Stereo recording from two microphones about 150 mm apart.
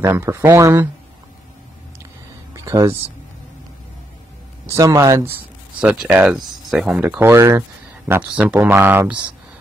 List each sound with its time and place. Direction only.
0.0 s speech: 15° right (ahead or behind)
2.5 s a sound: 20° right (ahead or behind)
4.7 s speech: 20° right (ahead or behind)
5.8 s speech: 10° right (ahead or behind)